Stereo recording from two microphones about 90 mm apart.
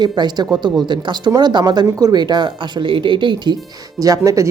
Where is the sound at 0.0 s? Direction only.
55° right (ahead or behind).